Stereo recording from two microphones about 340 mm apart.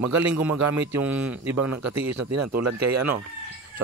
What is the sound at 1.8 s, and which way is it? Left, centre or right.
Speech, right.